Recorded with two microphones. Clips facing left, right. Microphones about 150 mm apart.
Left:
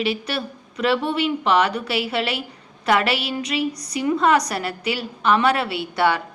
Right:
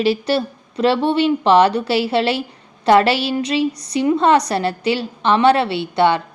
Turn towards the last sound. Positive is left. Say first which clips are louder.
# right 5 dB
turn(degrees=-25)  # may be behind; listen again after turning